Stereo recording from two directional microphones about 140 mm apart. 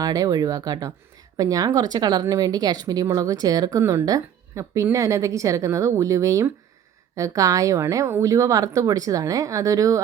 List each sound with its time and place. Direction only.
0.0 s speech: 25° right (ahead or behind)